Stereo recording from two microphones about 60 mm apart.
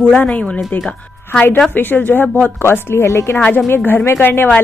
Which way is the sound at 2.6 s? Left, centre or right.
Left.